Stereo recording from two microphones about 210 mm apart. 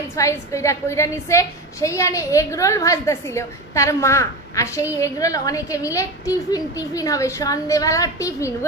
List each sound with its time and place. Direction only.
0.1 s a woman's voice: 15° left (ahead or behind)